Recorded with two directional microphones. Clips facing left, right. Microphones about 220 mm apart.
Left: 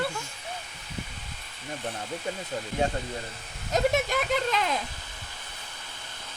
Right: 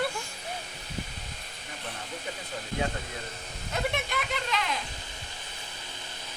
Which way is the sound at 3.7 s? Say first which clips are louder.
Left 7 dB; 45° left (ahead or behind).